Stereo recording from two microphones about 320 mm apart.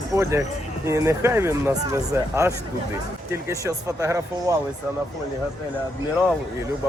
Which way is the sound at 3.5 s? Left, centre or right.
Centre.